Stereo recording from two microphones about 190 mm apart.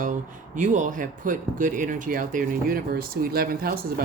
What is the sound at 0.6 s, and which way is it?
Speech, 40° right (ahead or behind).